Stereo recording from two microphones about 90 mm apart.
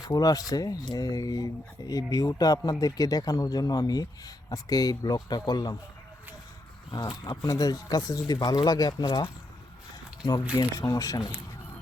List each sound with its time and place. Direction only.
0.1 s speech: 45° left (ahead or behind)
7.3 s speech: 45° left (ahead or behind)
10.6 s speech: 40° left (ahead or behind)